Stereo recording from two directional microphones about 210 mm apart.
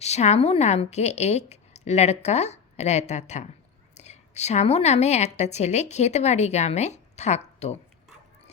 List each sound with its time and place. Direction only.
0.0 s a woman's voice: 30° left (ahead or behind)